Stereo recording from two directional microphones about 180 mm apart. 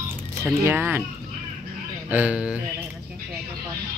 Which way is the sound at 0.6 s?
10° right (ahead or behind).